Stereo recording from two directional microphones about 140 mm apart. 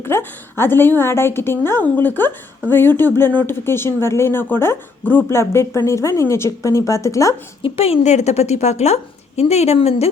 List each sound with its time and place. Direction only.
0.0 s a woman's voice: 15° left (ahead or behind)
7.6 s a woman's voice: 45° left (ahead or behind)